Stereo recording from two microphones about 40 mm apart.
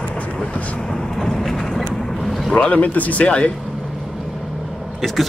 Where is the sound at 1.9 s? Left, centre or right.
Centre.